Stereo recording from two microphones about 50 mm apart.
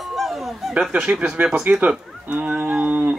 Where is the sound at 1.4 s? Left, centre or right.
Right.